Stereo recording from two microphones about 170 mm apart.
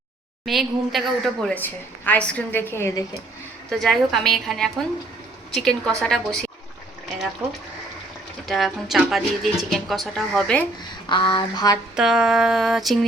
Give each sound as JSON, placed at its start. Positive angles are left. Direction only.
{"t": 0.4, "sound": "a woman's voice", "side_deg": 0}
{"t": 3.7, "sound": "speech", "side_deg": 0}
{"t": 8.4, "sound": "speech", "side_deg": 0}
{"t": 11.1, "sound": "a sound", "side_deg": 30}
{"t": 11.9, "sound": "speech", "side_deg": -5}